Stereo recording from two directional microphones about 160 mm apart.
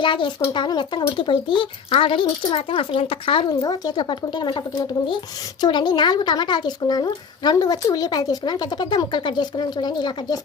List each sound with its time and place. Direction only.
0.0 s a child's voice: 30° left (ahead or behind)